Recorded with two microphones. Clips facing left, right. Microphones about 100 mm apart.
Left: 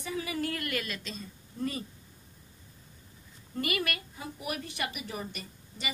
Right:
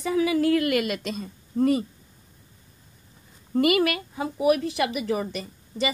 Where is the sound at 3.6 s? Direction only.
90° right.